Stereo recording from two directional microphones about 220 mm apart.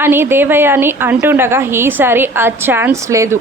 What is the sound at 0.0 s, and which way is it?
Speech, 10° right (ahead or behind).